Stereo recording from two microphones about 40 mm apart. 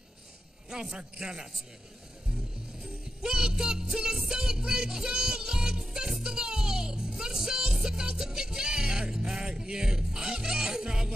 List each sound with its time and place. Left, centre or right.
0.7 s a man's voice: centre
3.2 s music: centre
3.9 s a man's voice: centre
4.3 s music: centre